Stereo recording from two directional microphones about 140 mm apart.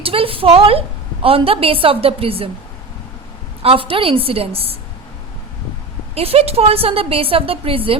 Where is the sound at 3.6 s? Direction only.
40° right (ahead or behind).